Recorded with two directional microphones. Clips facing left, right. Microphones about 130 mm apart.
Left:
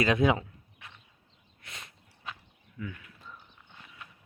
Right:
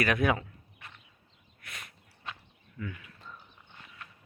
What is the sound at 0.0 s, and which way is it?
Speech, 20° left (ahead or behind).